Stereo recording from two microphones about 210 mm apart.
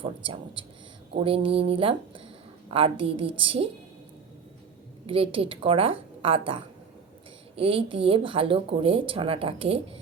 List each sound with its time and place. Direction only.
0.0 s speech: 25° right (ahead or behind)
5.0 s speech: 25° right (ahead or behind)